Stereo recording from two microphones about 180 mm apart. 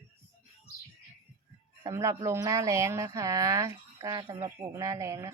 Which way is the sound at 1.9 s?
15° right (ahead or behind).